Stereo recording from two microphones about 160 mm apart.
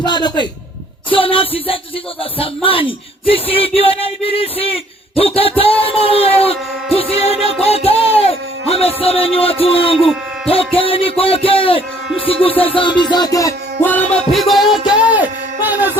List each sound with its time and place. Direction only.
0.0 s music: 25° left (ahead or behind)
1.1 s a man's voice: 35° left (ahead or behind)
10.0 s speech: centre (ahead or behind)
10.5 s a man's voice: 35° left (ahead or behind)
12.2 s music: 35° left (ahead or behind); by 16.0 s 10° right (ahead or behind)